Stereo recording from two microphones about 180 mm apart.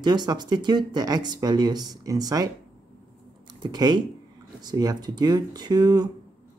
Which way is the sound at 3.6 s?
20° right (ahead or behind).